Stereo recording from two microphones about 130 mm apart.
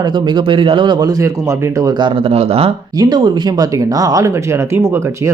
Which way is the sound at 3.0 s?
35° right (ahead or behind).